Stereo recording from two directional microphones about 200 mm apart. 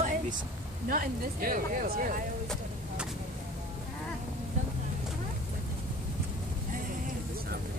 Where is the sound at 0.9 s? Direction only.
45° right (ahead or behind).